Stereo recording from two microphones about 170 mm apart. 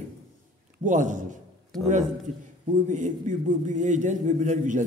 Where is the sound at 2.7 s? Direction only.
45° right (ahead or behind).